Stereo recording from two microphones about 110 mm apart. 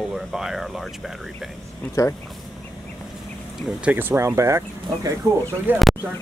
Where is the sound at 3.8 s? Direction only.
15° right (ahead or behind).